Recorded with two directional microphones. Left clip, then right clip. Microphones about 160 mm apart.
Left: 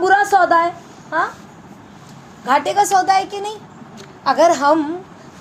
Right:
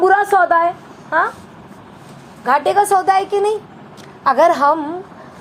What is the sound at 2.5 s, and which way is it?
A woman's voice, 20° right (ahead or behind).